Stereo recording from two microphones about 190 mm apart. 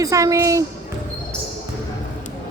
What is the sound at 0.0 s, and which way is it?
Speech, 15° right (ahead or behind).